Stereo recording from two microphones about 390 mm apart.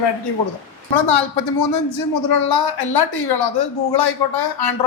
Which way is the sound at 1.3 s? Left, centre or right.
Left.